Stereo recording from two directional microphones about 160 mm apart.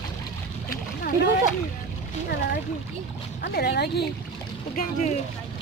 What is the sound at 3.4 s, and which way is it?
Speech, 85° left.